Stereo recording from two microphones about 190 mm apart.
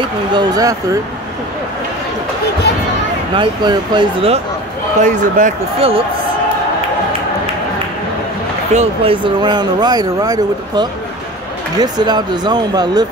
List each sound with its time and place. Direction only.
0.3 s speech: 20° right (ahead or behind)
3.3 s speech: 25° right (ahead or behind)
5.0 s speech: 40° right (ahead or behind)
8.7 s speech: 30° right (ahead or behind)